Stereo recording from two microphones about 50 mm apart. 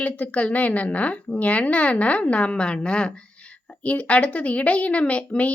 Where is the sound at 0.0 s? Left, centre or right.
Left.